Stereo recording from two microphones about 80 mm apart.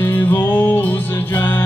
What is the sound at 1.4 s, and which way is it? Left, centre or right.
Music, left.